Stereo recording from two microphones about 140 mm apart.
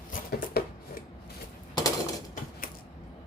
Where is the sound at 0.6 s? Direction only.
90° left.